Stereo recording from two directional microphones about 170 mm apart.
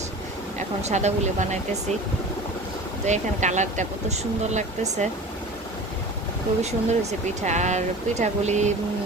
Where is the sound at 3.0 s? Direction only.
45° right (ahead or behind).